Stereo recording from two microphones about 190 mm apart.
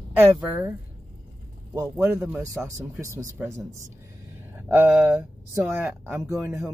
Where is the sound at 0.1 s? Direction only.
10° right (ahead or behind).